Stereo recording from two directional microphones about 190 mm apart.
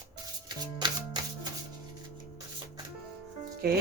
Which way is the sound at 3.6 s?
55° right (ahead or behind).